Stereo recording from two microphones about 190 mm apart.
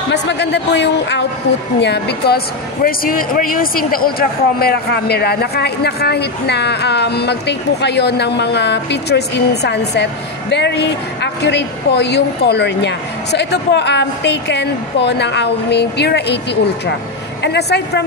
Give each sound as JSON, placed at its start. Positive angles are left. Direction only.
{"t": 0.1, "sound": "speech", "side_deg": 65}
{"t": 17.4, "sound": "speech", "side_deg": 60}